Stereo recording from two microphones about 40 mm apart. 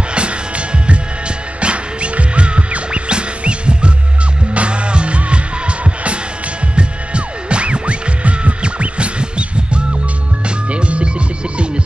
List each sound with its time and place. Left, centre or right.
1.6 s music: right
6.7 s music: right
10.7 s music: right